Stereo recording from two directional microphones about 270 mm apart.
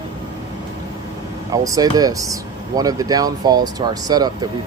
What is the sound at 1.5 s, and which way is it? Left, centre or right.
Speech, centre.